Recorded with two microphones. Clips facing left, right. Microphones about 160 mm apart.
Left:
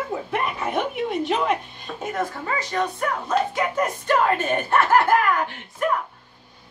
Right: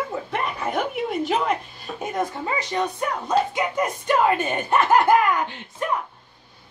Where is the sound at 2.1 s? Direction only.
20° right (ahead or behind).